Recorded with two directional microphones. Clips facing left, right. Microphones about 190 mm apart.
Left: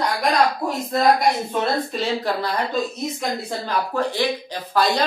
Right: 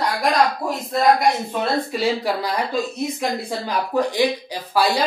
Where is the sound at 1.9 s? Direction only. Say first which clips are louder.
Right 2 dB; 10° right (ahead or behind).